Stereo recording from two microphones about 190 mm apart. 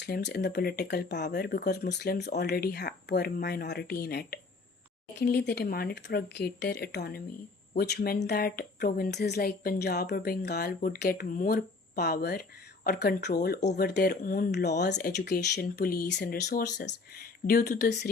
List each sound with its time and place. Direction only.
0.0 s speech: 65° left (ahead or behind)